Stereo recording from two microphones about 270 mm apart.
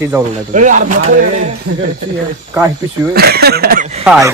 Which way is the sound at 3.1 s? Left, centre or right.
Right.